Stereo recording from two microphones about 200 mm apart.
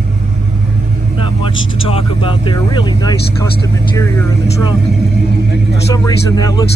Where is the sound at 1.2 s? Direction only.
25° left (ahead or behind).